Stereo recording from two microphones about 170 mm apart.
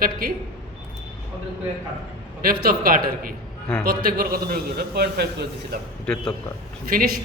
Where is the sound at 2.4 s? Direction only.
60° right (ahead or behind).